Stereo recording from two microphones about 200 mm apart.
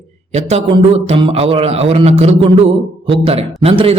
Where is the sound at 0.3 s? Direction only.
30° right (ahead or behind).